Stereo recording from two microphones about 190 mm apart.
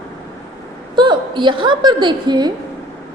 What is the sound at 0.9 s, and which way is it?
A woman's voice, 25° right (ahead or behind).